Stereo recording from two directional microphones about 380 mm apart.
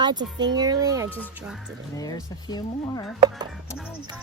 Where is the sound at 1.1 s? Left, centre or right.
Centre.